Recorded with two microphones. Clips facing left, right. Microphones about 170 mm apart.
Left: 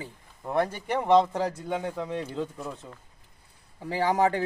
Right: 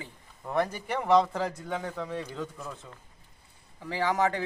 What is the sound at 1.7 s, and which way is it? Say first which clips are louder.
Speech: left 3 dB; 10° left (ahead or behind).